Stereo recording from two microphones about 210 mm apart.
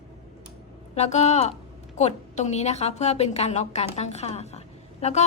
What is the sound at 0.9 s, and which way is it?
A woman's voice, 30° left (ahead or behind).